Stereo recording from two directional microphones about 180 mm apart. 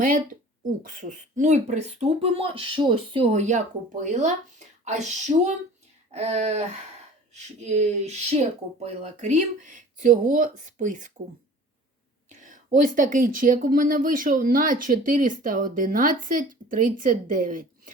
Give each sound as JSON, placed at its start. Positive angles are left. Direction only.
{"t": 0.8, "sound": "speech", "side_deg": -45}
{"t": 12.3, "sound": "speech", "side_deg": -45}